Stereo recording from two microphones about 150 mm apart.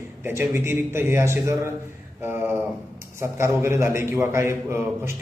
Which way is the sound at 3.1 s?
20° right (ahead or behind).